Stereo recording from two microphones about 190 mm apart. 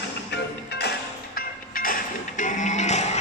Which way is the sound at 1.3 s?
50° left (ahead or behind).